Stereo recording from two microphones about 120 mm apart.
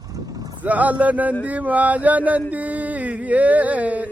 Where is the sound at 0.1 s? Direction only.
30° right (ahead or behind).